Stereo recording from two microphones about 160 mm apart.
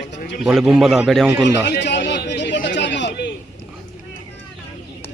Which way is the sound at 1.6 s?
90° left.